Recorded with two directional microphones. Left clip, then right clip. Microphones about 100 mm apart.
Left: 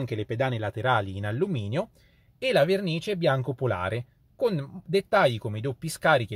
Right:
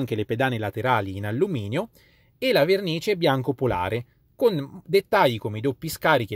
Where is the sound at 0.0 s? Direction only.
45° right (ahead or behind).